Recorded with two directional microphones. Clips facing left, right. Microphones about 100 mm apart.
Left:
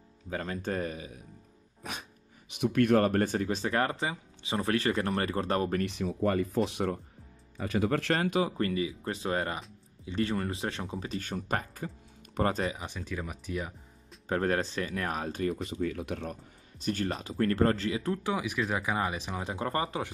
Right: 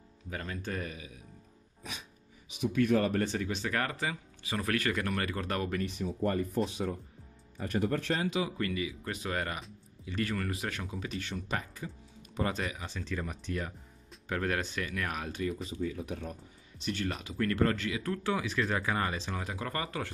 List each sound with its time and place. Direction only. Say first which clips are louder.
0.3 s speech: left 5 dB; 35° left (ahead or behind)
1.8 s music: left 4 dB; 55° left (ahead or behind)
2.5 s speech: left 3 dB; 60° left (ahead or behind); by 5.8 s 30° left (ahead or behind)
5.8 s speech: left 3 dB; 80° left; by 7.0 s 65° left (ahead or behind)
7.5 s speech: left 3 dB; 85° left; by 12.7 s 40° left (ahead or behind)
12.7 s speech: even; 15° left (ahead or behind)
14.3 s speech: left 4 dB; 35° left (ahead or behind)
15.4 s speech: left 3 dB; 60° left (ahead or behind)
16.8 s speech: left 3 dB; 40° left (ahead or behind)
18.1 s speech: left 1 dB; 15° left (ahead or behind)
19.3 s speech: left 4 dB; 25° left (ahead or behind)